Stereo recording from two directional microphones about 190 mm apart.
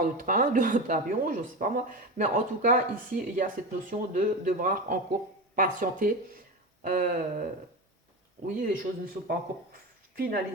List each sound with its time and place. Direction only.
0.0 s speech: 45° right (ahead or behind)
8.4 s speech: 50° right (ahead or behind)